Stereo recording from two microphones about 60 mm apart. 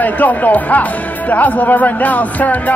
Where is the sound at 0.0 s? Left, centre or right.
Left.